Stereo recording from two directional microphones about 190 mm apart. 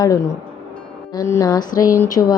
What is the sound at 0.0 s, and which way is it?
Speech, 20° left (ahead or behind).